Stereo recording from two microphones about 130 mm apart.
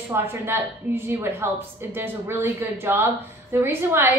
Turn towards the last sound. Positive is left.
turn(degrees=-20)  # may be behind; listen again after turning